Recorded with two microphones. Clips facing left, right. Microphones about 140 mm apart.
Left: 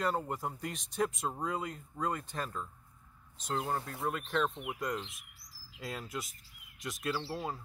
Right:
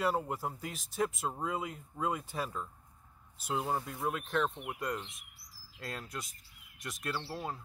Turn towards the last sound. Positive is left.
turn(degrees=0)  # may be behind; listen again after turning